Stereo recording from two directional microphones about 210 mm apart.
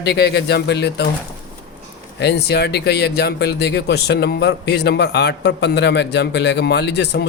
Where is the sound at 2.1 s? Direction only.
55° left (ahead or behind).